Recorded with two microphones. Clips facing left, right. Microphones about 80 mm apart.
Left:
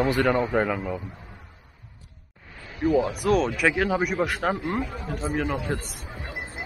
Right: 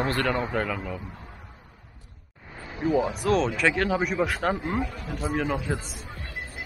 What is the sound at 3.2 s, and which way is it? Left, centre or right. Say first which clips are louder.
A man's voice: left 1 dB; centre.